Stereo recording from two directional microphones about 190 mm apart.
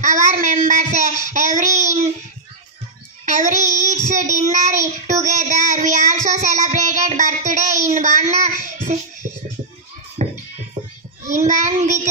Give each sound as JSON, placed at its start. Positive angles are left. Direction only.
{"t": 0.0, "sound": "child singing", "side_deg": -40}
{"t": 3.3, "sound": "child singing", "side_deg": -40}
{"t": 8.9, "sound": "music", "side_deg": -40}
{"t": 10.2, "sound": "music", "side_deg": -35}
{"t": 11.4, "sound": "child singing", "side_deg": -40}